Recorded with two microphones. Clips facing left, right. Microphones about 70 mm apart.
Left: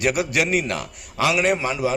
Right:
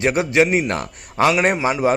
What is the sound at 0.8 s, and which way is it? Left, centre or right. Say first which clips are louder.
Speech: right 5 dB; right.